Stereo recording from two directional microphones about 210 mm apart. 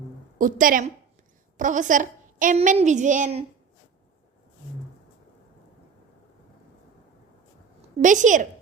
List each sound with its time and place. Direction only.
0.3 s a woman's voice: 40° right (ahead or behind)
8.0 s a woman's voice: 35° right (ahead or behind)